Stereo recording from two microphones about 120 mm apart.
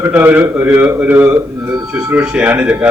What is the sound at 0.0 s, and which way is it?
A man's voice, 15° right (ahead or behind).